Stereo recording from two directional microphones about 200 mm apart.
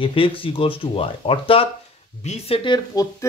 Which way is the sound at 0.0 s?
25° left (ahead or behind).